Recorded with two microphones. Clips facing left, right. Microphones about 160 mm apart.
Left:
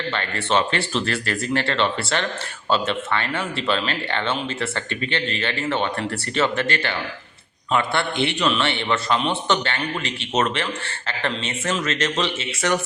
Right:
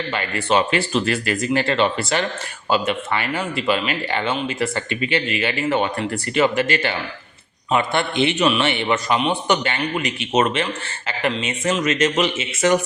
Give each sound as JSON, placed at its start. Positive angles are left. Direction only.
{"t": 0.1, "sound": "a man's voice", "side_deg": -10}